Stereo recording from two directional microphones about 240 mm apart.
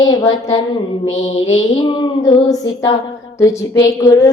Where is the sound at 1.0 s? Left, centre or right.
Left.